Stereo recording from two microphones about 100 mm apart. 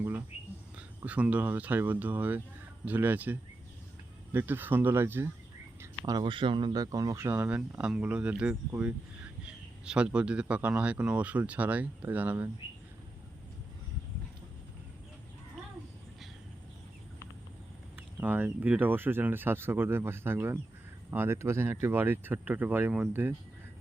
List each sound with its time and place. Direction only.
0.0 s whispering: 20° right (ahead or behind)
0.8 s speech: 15° right (ahead or behind)
6.2 s speech: 55° right (ahead or behind); by 12.5 s 15° right (ahead or behind)
17.9 s speech: 15° right (ahead or behind)